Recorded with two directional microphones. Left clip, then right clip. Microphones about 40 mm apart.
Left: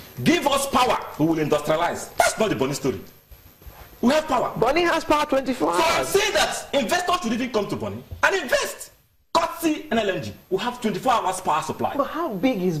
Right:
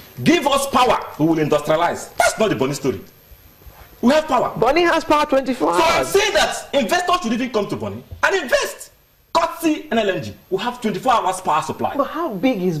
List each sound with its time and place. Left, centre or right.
0.2 s a man's voice: right
4.0 s a man's voice: right